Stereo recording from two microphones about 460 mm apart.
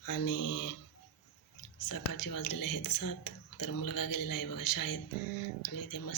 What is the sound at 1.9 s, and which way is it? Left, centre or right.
Speech, left.